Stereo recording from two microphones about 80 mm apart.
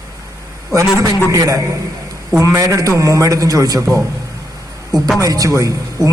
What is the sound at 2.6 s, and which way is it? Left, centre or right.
A man's voice, right.